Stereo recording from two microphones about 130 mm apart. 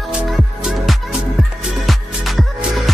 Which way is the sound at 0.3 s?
5° right (ahead or behind).